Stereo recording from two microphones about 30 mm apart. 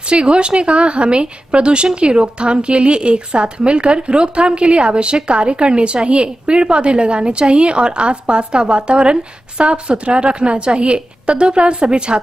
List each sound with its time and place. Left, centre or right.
0.1 s a woman's voice: right